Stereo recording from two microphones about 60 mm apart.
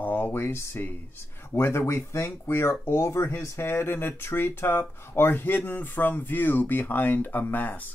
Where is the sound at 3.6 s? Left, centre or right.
Left.